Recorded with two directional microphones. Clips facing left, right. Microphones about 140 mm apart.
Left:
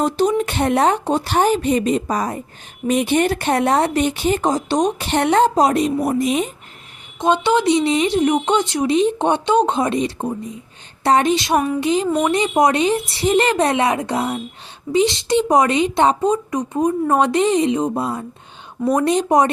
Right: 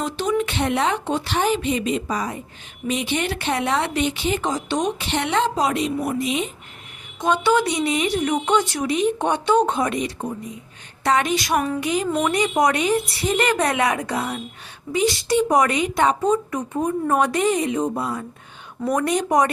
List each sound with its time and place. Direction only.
0.0 s speech: 40° left (ahead or behind)
7.2 s speech: 25° left (ahead or behind)